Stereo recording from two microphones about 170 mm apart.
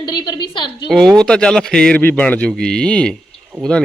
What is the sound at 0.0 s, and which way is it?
Speech, 25° left (ahead or behind).